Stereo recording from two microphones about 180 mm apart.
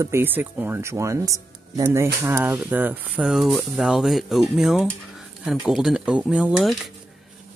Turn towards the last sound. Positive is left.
turn(degrees=-5)  # may be behind; listen again after turning